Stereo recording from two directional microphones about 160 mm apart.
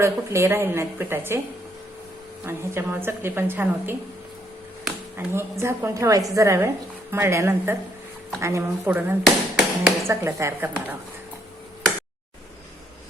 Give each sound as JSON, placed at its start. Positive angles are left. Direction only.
{"t": 0.0, "sound": "a woman's voice", "side_deg": -15}
{"t": 2.4, "sound": "a woman's voice", "side_deg": -15}
{"t": 5.1, "sound": "a woman's voice", "side_deg": -15}
{"t": 9.2, "sound": "tap", "side_deg": 0}
{"t": 10.1, "sound": "a woman's voice", "side_deg": -20}